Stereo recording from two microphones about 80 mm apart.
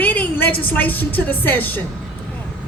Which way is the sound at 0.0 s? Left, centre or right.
Left.